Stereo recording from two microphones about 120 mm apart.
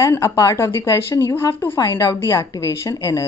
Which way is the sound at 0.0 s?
25° left (ahead or behind).